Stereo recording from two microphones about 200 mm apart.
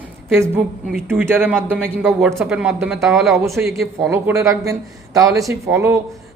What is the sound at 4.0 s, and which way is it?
Speech, 15° right (ahead or behind).